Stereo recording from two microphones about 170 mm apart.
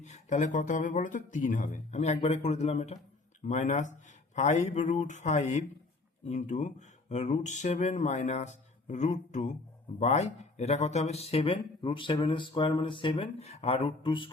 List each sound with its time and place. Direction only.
0.0 s speech: 45° left (ahead or behind)